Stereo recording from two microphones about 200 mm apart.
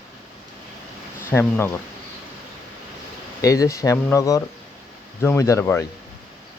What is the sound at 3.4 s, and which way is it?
Speech, 15° left (ahead or behind).